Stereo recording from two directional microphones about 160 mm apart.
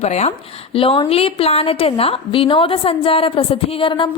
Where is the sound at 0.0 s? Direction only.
45° left (ahead or behind).